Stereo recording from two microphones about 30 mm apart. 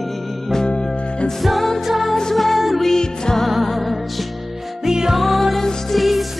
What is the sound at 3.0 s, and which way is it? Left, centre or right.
Music, left.